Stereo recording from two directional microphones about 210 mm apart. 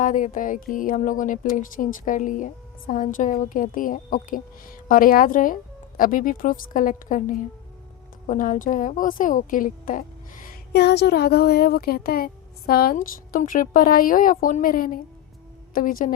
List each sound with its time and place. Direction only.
0.0 s a woman's voice: 40° left (ahead or behind)